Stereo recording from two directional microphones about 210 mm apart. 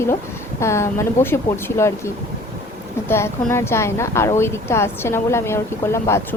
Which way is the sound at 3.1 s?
10° left (ahead or behind).